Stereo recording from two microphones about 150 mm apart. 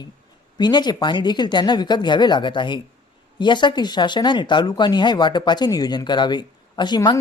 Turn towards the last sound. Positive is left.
turn(degrees=30)  # may be behind; listen again after turning